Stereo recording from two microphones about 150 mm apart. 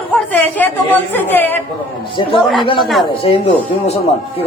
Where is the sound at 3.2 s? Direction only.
45° left (ahead or behind).